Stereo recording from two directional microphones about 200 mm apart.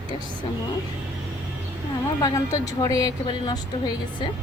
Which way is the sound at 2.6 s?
15° left (ahead or behind).